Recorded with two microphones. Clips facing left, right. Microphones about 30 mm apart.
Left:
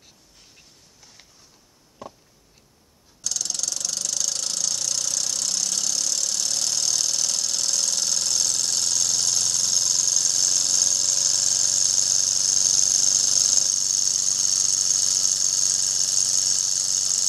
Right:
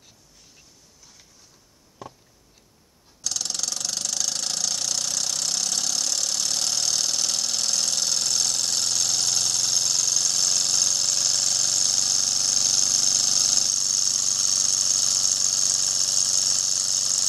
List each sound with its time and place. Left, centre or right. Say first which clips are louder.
3.3 s engine: even; centre